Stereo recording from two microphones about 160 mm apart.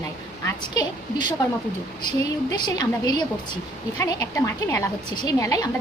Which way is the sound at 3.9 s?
15° left (ahead or behind).